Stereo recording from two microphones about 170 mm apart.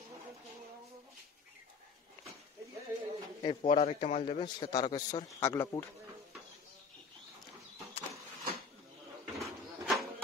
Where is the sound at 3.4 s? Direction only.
35° left (ahead or behind); by 5.8 s 15° left (ahead or behind).